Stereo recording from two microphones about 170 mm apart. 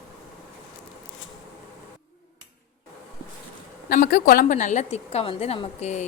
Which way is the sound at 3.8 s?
60° left (ahead or behind).